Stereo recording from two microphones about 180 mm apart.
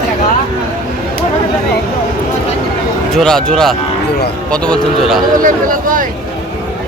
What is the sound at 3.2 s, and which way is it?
A man's voice, 5° left (ahead or behind).